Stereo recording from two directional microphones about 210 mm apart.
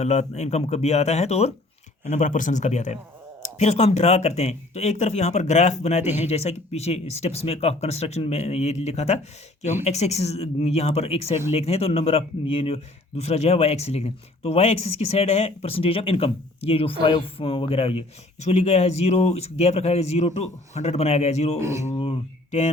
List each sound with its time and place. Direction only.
0.0 s speech: 30° left (ahead or behind)
21.6 s speech: 15° right (ahead or behind)
21.8 s a sound: 30° left (ahead or behind)